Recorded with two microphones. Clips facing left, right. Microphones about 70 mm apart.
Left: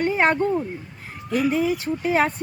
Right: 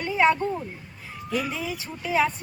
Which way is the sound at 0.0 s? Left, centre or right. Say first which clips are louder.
Left 1 dB; left.